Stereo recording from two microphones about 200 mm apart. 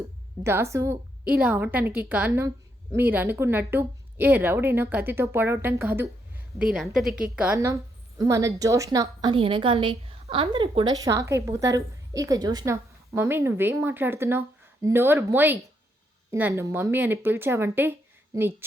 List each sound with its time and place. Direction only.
0.4 s a woman's voice: 15° right (ahead or behind)